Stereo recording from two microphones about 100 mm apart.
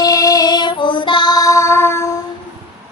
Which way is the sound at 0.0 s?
35° left (ahead or behind).